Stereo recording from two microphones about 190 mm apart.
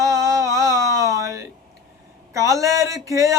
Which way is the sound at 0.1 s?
15° right (ahead or behind).